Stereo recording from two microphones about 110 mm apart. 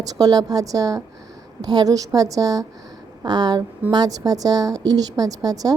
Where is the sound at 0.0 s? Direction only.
35° right (ahead or behind).